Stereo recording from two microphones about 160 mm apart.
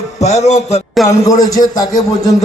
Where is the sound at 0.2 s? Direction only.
45° left (ahead or behind).